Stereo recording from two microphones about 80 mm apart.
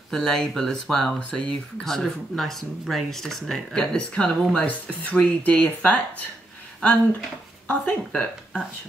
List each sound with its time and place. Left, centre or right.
0.1 s speech: centre
4.6 s speech: centre